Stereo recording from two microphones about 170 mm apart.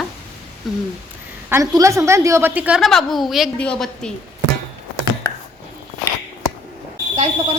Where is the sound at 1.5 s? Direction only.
20° right (ahead or behind); by 4.1 s 5° left (ahead or behind).